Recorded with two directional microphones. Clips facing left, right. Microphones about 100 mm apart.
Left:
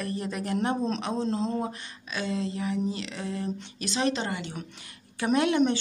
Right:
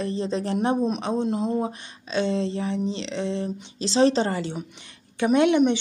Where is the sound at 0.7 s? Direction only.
10° right (ahead or behind); by 4.5 s 35° right (ahead or behind).